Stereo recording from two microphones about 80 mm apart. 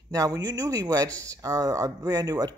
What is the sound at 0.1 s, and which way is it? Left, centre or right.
Speech, right.